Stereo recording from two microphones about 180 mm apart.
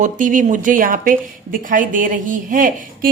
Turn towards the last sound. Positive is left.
turn(degrees=-50)  # may be behind; listen again after turning